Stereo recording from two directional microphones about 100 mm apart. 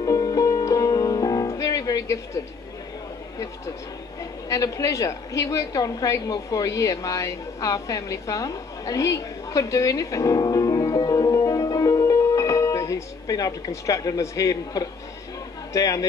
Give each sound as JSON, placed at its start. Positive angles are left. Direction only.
{"t": 0.0, "sound": "music", "side_deg": 35}
{"t": 4.2, "sound": "a woman's voice", "side_deg": 35}